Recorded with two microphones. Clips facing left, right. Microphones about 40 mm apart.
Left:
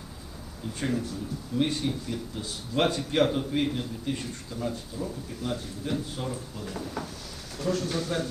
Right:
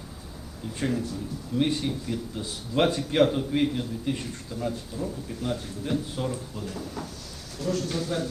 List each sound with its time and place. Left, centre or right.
0.8 s speech: centre
1.5 s speech: centre
6.7 s speech: left